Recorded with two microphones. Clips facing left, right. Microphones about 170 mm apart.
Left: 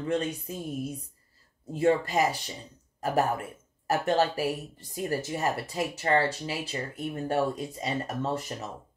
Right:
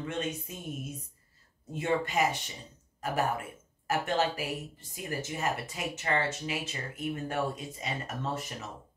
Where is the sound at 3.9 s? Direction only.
40° left (ahead or behind).